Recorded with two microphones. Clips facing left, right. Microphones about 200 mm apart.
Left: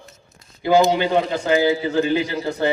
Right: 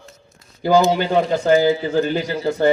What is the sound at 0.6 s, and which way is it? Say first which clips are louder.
A man's voice: even; 40° right (ahead or behind).